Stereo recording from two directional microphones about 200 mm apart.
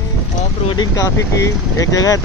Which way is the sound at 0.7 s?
20° left (ahead or behind).